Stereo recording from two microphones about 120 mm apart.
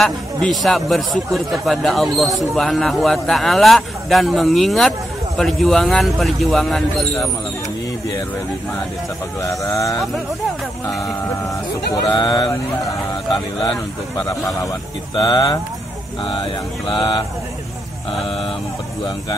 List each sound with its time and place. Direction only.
0.0 s a man's voice: centre (ahead or behind)
9.4 s speech: 25° left (ahead or behind)
11.9 s speech: 35° left (ahead or behind)
16.8 s speech: 45° left (ahead or behind)